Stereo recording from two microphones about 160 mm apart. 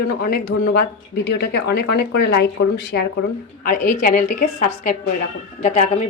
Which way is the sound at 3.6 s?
55° left (ahead or behind).